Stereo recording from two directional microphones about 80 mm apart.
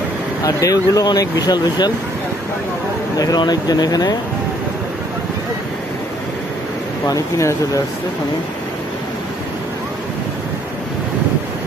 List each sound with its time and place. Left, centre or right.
0.4 s speech: left
3.2 s speech: left
7.1 s speech: left